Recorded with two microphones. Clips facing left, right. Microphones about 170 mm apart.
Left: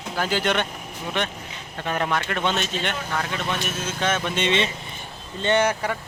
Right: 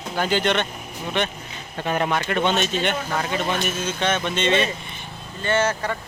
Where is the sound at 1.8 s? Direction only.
5° right (ahead or behind).